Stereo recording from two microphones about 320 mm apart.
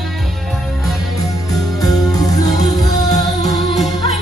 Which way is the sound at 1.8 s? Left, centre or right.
Centre.